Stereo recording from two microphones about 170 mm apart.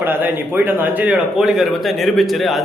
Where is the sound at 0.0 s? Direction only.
10° right (ahead or behind).